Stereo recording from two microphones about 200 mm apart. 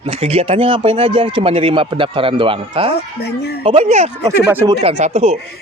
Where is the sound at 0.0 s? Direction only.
30° right (ahead or behind).